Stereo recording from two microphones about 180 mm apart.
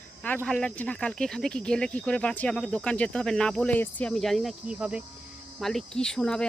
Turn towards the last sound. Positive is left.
turn(degrees=5)  # may be behind; listen again after turning